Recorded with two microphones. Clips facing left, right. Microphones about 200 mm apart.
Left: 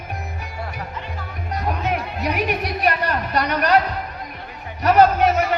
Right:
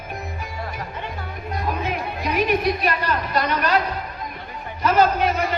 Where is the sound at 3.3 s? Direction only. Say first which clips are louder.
Left 3 dB; 65° left (ahead or behind).